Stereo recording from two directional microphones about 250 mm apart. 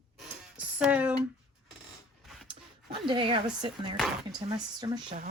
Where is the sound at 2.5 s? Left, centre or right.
Centre.